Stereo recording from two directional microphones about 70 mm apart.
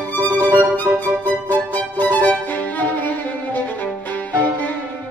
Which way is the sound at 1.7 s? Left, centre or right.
Left.